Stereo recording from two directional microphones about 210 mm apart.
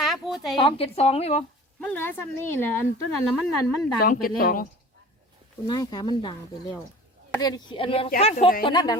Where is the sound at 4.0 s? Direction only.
45° left (ahead or behind).